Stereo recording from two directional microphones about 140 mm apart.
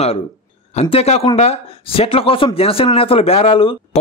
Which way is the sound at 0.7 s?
45° left (ahead or behind).